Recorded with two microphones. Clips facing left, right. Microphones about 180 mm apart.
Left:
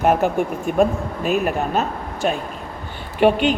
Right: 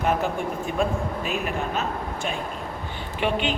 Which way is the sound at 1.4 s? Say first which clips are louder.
Left 6 dB; 40° left (ahead or behind).